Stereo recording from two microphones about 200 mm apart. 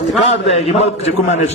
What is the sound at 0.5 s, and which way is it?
Speech, 30° left (ahead or behind).